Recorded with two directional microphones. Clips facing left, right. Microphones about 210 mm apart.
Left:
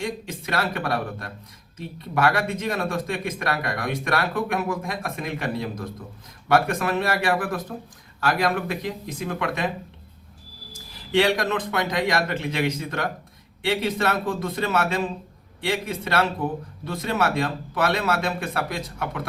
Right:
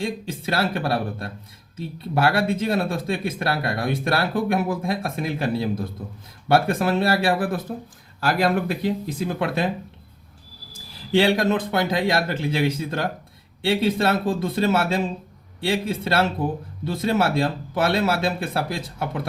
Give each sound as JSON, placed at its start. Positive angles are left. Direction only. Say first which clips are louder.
{"t": 0.0, "sound": "speech", "louder": "right 3 dB", "side_deg": -30}
{"t": 11.1, "sound": "speech", "louder": "right 2 dB", "side_deg": -30}